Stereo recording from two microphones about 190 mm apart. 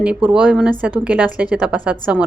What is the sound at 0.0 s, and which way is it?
Speech, 5° right (ahead or behind).